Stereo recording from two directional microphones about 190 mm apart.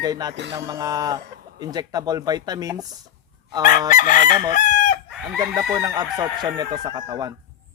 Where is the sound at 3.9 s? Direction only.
45° left (ahead or behind).